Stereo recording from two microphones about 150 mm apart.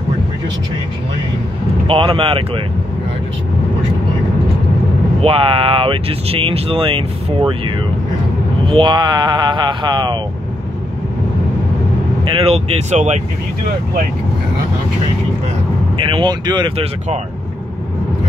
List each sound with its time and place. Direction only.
1.9 s speech: 40° right (ahead or behind)
5.2 s speech: 40° right (ahead or behind)
12.3 s speech: 40° right (ahead or behind)
16.0 s speech: 35° right (ahead or behind)